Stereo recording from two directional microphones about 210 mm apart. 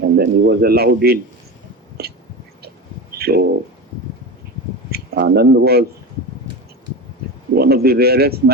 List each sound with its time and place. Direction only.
0.0 s a man's voice: 50° right (ahead or behind)
2.0 s whispering: 50° right (ahead or behind)
3.2 s bird: 50° right (ahead or behind)
4.9 s speech: 50° right (ahead or behind)
7.5 s a man's voice: 50° right (ahead or behind)